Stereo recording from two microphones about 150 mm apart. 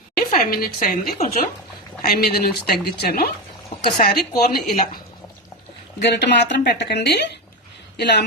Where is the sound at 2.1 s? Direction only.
85° left.